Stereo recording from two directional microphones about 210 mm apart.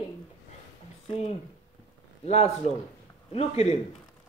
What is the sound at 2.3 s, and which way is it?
A man's voice, 30° left (ahead or behind).